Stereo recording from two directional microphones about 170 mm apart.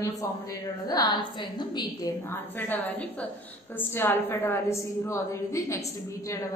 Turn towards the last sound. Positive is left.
turn(degrees=15)  # may be behind; listen again after turning